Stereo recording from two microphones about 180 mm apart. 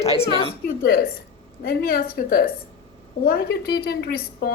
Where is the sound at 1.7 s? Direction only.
55° left (ahead or behind).